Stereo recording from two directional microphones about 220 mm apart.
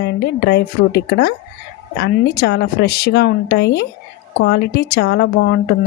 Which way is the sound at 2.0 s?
50° left (ahead or behind).